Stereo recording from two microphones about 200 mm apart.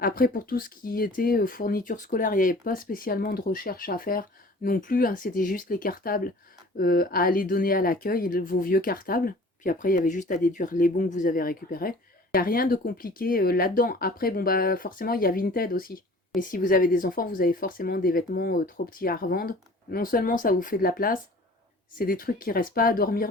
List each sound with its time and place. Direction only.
0.0 s speech: 45° left (ahead or behind)